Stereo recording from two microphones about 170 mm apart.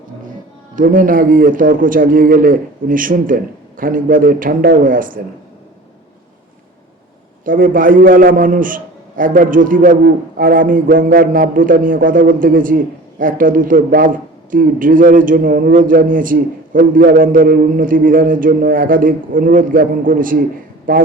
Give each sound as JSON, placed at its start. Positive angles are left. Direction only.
{"t": 0.8, "sound": "a man's voice", "side_deg": -55}
{"t": 7.4, "sound": "a man's voice", "side_deg": -55}